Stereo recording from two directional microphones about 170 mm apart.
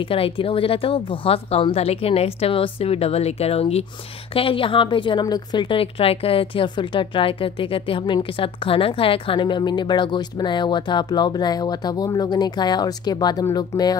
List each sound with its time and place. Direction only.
0.0 s a woman's voice: 30° left (ahead or behind)